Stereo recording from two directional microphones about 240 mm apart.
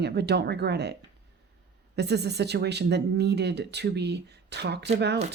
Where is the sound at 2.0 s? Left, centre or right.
Right.